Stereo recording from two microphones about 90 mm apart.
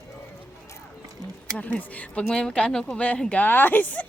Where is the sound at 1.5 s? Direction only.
15° left (ahead or behind).